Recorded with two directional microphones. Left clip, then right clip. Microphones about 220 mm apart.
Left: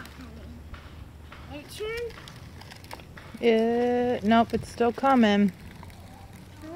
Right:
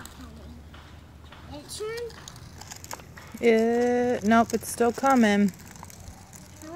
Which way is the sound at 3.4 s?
15° right (ahead or behind).